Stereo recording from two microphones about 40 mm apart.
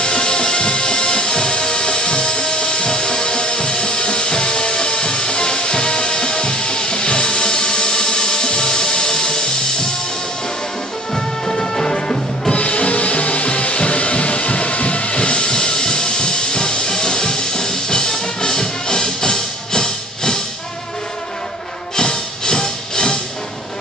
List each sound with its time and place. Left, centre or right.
0.0 s music: left
11.1 s music: centre
12.5 s music: left
21.9 s music: centre